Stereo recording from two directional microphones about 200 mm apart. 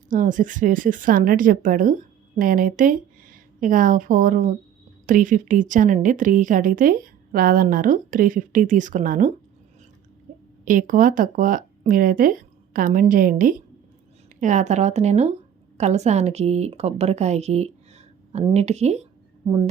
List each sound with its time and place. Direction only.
0.1 s a woman's voice: 40° right (ahead or behind)
10.3 s a sound: 40° right (ahead or behind)
10.7 s a woman's voice: 45° right (ahead or behind)